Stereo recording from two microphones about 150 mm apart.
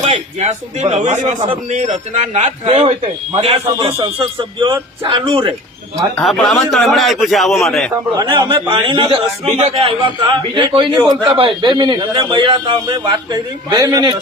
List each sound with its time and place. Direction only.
0.0 s a man's voice: 45° right (ahead or behind)
6.1 s a man's voice: 5° left (ahead or behind)
8.1 s a man's voice: 25° right (ahead or behind)